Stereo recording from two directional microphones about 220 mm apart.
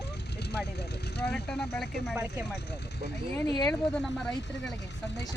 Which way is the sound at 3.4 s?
20° left (ahead or behind).